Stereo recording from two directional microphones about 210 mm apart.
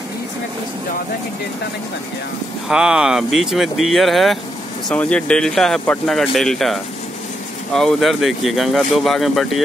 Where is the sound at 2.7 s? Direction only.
5° right (ahead or behind).